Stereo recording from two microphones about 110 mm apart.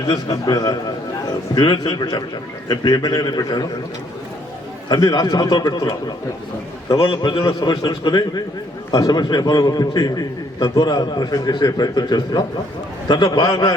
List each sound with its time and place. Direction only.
0.1 s a man's voice: 35° left (ahead or behind)
4.9 s a man's voice: 40° left (ahead or behind)
6.8 s a man's voice: 50° left (ahead or behind)